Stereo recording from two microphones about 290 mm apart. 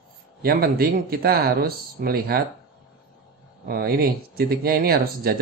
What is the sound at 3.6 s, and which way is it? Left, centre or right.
Speech, right.